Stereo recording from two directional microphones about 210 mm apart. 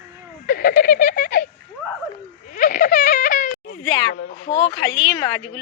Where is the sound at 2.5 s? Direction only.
40° left (ahead or behind).